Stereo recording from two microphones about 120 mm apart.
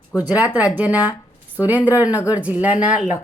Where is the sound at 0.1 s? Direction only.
10° right (ahead or behind).